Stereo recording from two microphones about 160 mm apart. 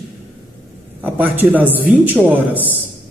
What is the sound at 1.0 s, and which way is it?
Speech, 10° right (ahead or behind).